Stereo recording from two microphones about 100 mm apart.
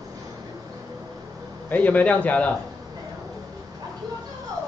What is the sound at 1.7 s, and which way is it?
Speech, 15° left (ahead or behind).